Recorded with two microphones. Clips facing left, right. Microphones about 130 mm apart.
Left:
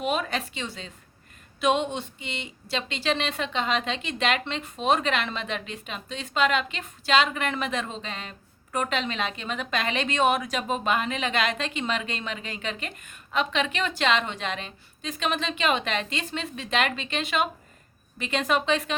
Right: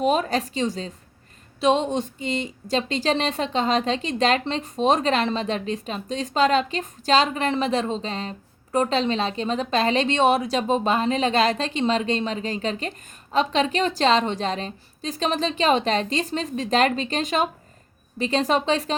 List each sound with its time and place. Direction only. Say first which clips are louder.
0.0 s a woman's voice: right 6 dB; 40° right (ahead or behind)